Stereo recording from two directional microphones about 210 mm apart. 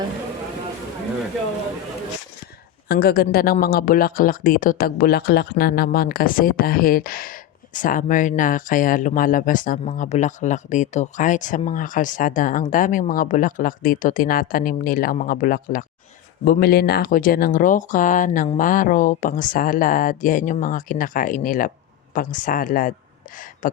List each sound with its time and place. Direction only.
2.9 s speech: 45° left (ahead or behind)